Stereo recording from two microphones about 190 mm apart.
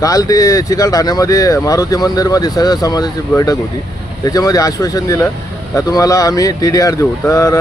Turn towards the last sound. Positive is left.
turn(degrees=15)  # may be behind; listen again after turning